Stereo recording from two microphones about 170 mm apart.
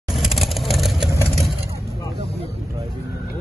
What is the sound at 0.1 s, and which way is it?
Vehicle, centre (ahead or behind).